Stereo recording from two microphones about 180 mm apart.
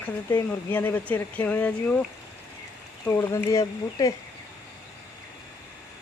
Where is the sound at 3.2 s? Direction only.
15° left (ahead or behind).